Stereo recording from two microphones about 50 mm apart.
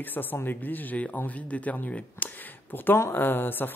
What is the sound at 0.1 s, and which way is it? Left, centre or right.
Speech, left.